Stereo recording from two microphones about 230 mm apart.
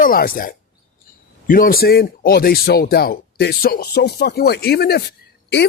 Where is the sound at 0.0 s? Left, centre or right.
Left.